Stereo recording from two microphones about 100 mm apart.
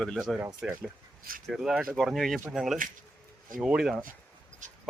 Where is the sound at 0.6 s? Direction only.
10° right (ahead or behind).